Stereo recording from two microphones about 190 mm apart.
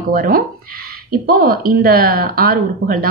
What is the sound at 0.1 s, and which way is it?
A woman's voice, 50° right (ahead or behind).